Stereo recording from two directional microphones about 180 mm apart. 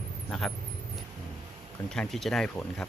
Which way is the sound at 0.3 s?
Centre (ahead or behind).